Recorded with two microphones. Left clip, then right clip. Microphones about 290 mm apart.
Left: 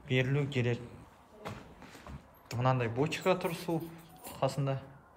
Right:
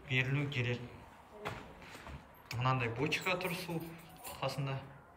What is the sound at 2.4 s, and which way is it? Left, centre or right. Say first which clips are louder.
A man's voice: left 3 dB; centre.